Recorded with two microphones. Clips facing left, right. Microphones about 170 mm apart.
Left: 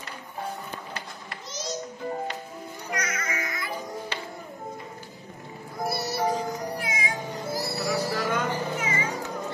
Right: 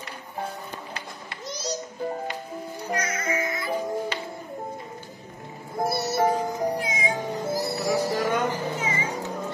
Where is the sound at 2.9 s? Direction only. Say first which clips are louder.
Right 4 dB; 30° right (ahead or behind).